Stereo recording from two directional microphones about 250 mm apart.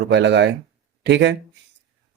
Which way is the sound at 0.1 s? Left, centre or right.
Right.